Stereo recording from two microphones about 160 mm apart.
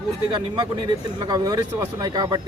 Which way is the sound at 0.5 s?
25° right (ahead or behind).